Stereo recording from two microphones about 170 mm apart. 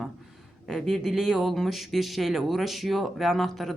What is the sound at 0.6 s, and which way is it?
Speech, centre (ahead or behind).